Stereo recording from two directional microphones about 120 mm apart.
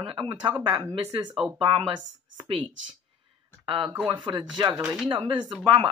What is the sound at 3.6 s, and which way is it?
Speech, 45° right (ahead or behind).